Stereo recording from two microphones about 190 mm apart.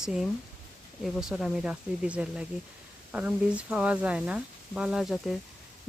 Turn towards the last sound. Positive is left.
turn(degrees=0)  # may be behind; listen again after turning